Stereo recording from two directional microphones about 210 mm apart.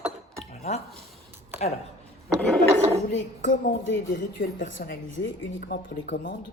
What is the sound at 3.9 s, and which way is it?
Speech, 60° left (ahead or behind).